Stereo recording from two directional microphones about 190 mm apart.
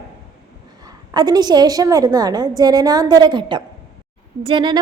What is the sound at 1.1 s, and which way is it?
A woman's voice, 20° right (ahead or behind).